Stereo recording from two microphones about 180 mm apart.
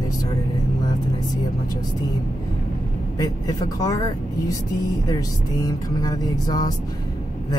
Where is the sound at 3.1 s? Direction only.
20° left (ahead or behind).